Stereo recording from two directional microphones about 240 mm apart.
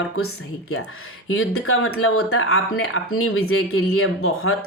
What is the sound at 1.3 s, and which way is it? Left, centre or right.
Speech, left.